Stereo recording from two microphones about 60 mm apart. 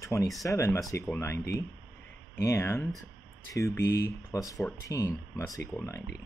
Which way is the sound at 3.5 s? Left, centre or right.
Left.